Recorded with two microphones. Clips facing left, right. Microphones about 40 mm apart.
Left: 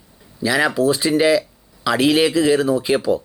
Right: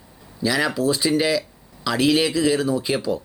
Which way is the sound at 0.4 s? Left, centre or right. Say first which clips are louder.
Left 4 dB; centre.